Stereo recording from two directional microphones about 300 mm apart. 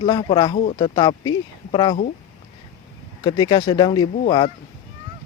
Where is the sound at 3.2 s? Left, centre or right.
Centre.